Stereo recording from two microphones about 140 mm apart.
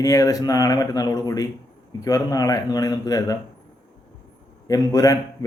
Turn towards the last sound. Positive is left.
turn(degrees=25)  # may be behind; listen again after turning